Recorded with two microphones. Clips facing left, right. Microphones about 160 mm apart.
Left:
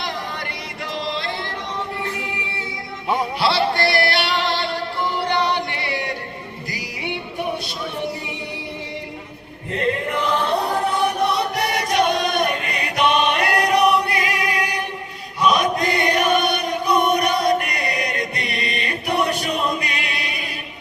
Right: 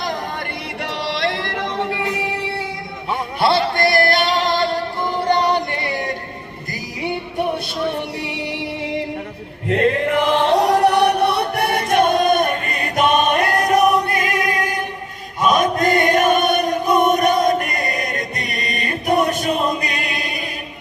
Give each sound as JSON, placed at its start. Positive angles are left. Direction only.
{"t": 1.0, "sound": "yodeling", "side_deg": -80}
{"t": 3.4, "sound": "music", "side_deg": -50}
{"t": 8.2, "sound": "music", "side_deg": -75}
{"t": 9.6, "sound": "chant", "side_deg": -85}
{"t": 15.4, "sound": "choir", "side_deg": -45}